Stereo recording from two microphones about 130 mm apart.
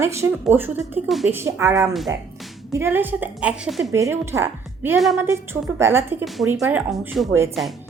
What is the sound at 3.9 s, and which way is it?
A woman's voice, 20° right (ahead or behind).